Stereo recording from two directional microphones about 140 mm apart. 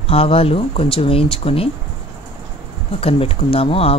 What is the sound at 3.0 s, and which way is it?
Speech, 45° left (ahead or behind).